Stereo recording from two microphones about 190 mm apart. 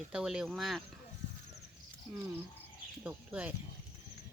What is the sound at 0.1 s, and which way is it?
Speech, 5° right (ahead or behind).